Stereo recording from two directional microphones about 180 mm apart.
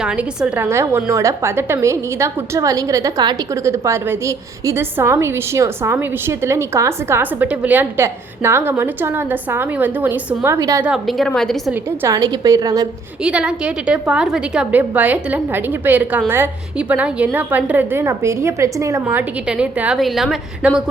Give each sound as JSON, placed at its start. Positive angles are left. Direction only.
{"t": 0.0, "sound": "a woman's voice", "side_deg": -5}
{"t": 10.8, "sound": "a woman's voice", "side_deg": 0}
{"t": 12.0, "sound": "a woman's voice", "side_deg": -20}
{"t": 13.2, "sound": "a woman's voice", "side_deg": -5}
{"t": 19.0, "sound": "a woman's voice", "side_deg": -5}